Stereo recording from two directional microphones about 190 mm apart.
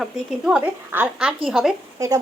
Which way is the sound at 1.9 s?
15° right (ahead or behind).